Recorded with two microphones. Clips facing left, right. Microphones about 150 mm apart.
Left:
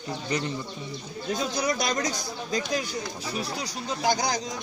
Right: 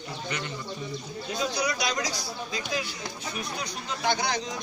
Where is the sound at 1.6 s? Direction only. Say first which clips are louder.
Left 4 dB; 50° left (ahead or behind).